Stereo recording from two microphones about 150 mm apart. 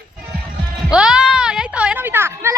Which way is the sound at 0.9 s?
5° right (ahead or behind).